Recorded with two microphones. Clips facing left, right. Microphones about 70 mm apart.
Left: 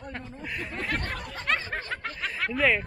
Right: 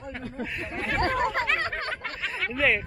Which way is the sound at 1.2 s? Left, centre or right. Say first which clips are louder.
Right 13 dB; right.